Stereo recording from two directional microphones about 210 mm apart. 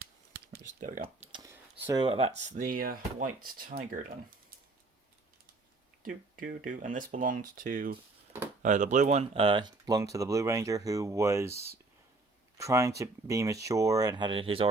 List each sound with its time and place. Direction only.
0.3 s computer keyboard: 45° right (ahead or behind)
1.0 s a sound: 25° right (ahead or behind)
1.9 s speech: 25° right (ahead or behind); by 4.0 s 45° right (ahead or behind)
6.3 s speech: 40° right (ahead or behind); by 11.5 s 15° right (ahead or behind)
12.5 s speech: 15° right (ahead or behind)